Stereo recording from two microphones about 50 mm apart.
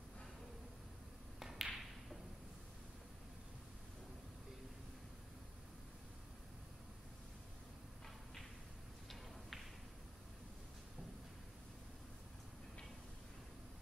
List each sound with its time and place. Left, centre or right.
1.4 s tap: centre